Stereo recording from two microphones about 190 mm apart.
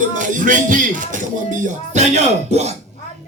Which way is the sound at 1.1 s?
40° right (ahead or behind).